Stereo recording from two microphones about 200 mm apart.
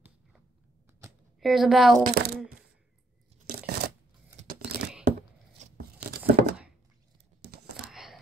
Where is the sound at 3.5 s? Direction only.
50° right (ahead or behind).